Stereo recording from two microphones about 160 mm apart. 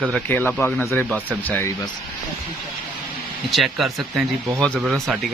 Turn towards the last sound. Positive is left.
turn(degrees=0)  # may be behind; listen again after turning